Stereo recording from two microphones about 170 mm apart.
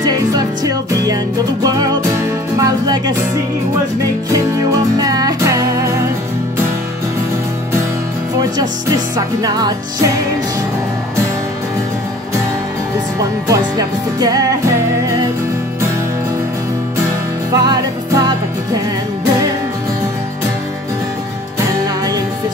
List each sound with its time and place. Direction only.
0.0 s music: 20° right (ahead or behind)
4.9 s music: 20° right (ahead or behind)
8.4 s music: 25° right (ahead or behind)
13.5 s music: 20° right (ahead or behind)
17.5 s music: 20° right (ahead or behind)